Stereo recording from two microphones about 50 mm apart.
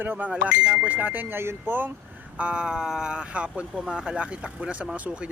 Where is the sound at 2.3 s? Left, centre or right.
Right.